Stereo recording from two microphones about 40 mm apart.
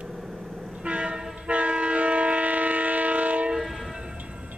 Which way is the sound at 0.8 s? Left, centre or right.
Right.